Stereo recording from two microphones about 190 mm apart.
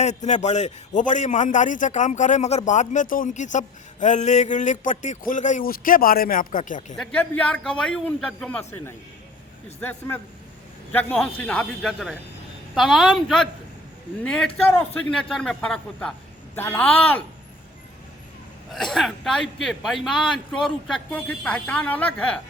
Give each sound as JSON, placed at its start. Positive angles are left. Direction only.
{"t": 0.0, "sound": "a man's voice", "side_deg": 35}
{"t": 6.9, "sound": "a man's voice", "side_deg": 5}
{"t": 10.9, "sound": "a man's voice", "side_deg": 5}
{"t": 14.7, "sound": "a man's voice", "side_deg": 5}
{"t": 18.7, "sound": "a man's voice", "side_deg": 0}